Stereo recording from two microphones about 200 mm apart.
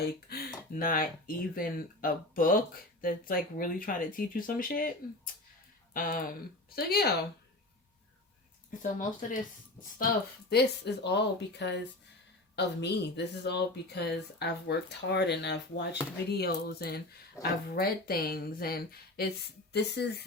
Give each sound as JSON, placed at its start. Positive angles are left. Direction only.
{"t": 0.3, "sound": "speech", "side_deg": 45}
{"t": 8.8, "sound": "speech", "side_deg": 40}
{"t": 10.5, "sound": "speech", "side_deg": 55}